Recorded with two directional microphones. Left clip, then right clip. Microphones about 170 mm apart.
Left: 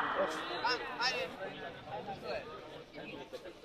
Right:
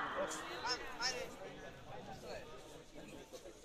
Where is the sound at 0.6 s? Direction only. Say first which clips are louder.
Left 7 dB; 40° left (ahead or behind).